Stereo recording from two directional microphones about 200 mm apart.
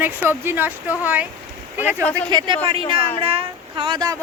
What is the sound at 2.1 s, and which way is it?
Speech, 20° right (ahead or behind).